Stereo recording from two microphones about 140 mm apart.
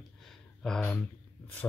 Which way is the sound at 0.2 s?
Centre (ahead or behind).